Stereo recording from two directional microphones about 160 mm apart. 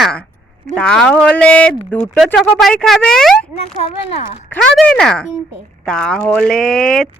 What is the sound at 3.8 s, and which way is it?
Speech, 40° left (ahead or behind).